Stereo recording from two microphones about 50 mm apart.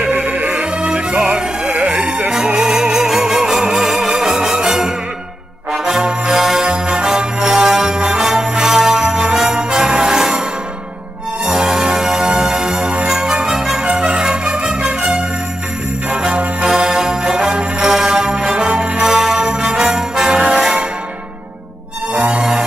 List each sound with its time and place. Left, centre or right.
0.1 s music: right
0.7 s music: right
2.3 s music: centre
11.5 s music: centre
19.9 s jingle bell: centre
20.4 s music: centre
22.3 s music: right